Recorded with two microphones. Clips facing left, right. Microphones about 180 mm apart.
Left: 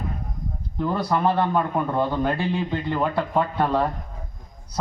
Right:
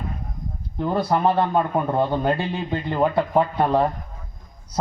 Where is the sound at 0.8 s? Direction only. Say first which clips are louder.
Right 2 dB; 25° right (ahead or behind).